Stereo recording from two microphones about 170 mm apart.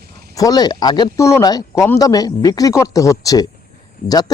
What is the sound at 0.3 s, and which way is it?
Speech, 20° left (ahead or behind).